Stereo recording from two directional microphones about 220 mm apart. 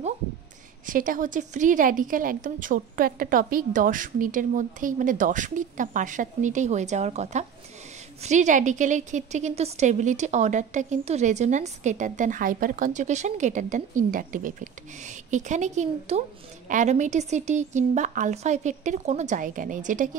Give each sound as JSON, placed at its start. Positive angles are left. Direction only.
{"t": 0.8, "sound": "a woman's voice", "side_deg": -40}